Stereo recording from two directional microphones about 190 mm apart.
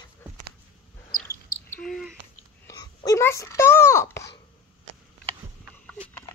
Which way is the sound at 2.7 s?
20° left (ahead or behind).